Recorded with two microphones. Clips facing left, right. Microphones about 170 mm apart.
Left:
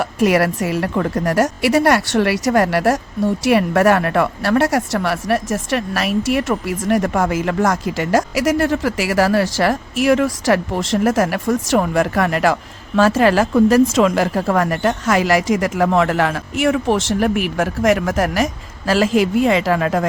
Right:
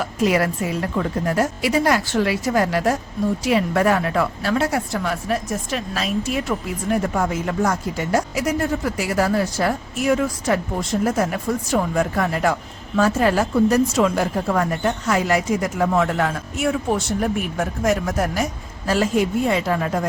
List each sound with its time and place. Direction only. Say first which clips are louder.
0.0 s a woman's voice: left 4 dB; 65° left (ahead or behind); by 20.1 s 90° left